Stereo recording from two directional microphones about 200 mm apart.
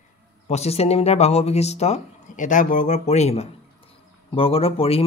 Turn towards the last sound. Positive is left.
turn(degrees=30)  # may be behind; listen again after turning